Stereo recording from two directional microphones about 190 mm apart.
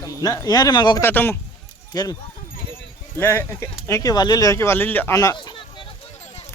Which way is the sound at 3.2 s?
10° left (ahead or behind).